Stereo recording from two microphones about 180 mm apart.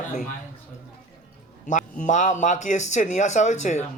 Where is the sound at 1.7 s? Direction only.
45° left (ahead or behind).